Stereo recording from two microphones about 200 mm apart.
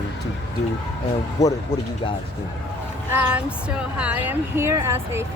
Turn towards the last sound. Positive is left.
turn(degrees=-10)  # may be behind; listen again after turning